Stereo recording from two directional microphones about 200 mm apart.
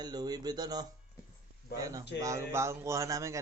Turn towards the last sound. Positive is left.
turn(degrees=-15)  # may be behind; listen again after turning